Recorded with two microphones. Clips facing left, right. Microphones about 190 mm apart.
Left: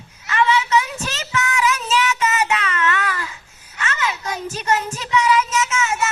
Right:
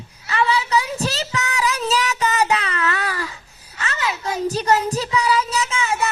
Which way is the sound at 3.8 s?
35° right (ahead or behind).